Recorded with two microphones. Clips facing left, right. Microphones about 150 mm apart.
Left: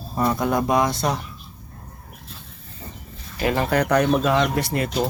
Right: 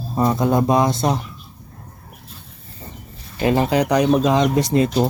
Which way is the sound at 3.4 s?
25° right (ahead or behind).